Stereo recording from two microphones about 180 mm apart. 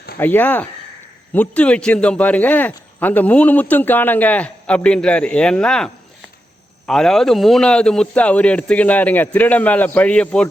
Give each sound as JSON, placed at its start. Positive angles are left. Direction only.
{"t": 0.2, "sound": "speech", "side_deg": 10}